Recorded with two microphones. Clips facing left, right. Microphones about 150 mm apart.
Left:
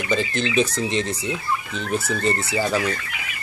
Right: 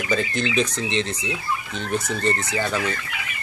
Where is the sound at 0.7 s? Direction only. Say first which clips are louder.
Left 2 dB; 40° left (ahead or behind).